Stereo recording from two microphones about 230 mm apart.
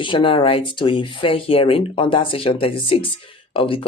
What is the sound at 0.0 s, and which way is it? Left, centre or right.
Speech, left.